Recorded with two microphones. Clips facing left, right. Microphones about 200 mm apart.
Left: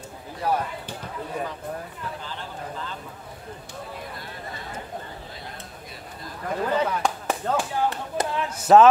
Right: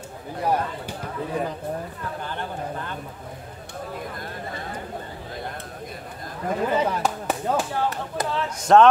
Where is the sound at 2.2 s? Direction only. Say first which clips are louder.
Right 5 dB; 55° right (ahead or behind).